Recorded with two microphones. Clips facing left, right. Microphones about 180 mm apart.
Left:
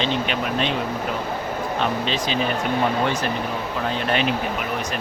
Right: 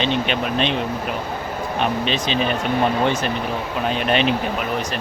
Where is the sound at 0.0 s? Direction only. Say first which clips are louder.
Right 2 dB; 20° right (ahead or behind).